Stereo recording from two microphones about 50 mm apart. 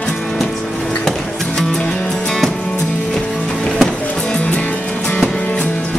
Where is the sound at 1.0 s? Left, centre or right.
Centre.